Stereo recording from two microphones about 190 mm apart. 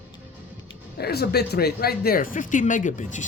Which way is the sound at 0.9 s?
55° left (ahead or behind).